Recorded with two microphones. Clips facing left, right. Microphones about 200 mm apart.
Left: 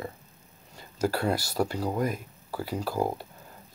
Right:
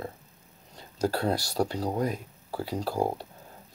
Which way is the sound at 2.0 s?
5° left (ahead or behind).